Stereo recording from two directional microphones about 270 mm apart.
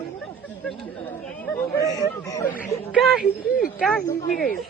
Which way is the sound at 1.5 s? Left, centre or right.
Centre.